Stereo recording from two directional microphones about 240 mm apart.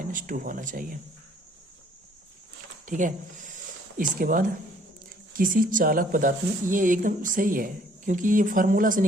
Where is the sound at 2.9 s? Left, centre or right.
Right.